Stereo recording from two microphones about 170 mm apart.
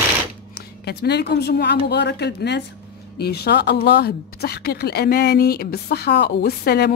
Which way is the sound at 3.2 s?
70° left (ahead or behind).